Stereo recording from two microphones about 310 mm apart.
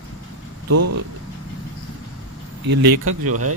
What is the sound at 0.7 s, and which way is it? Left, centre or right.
Speech, right.